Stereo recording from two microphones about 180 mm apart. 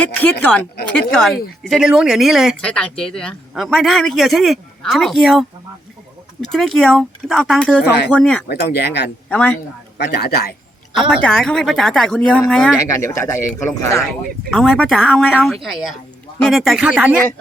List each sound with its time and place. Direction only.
0.0 s speech: 10° left (ahead or behind)
8.4 s speech: 65° left (ahead or behind)
9.3 s speech: 5° left (ahead or behind)
10.0 s speech: 60° left (ahead or behind)
11.1 s speech: 5° left (ahead or behind)
13.0 s speech: 15° left (ahead or behind)
14.5 s speech: 5° left (ahead or behind)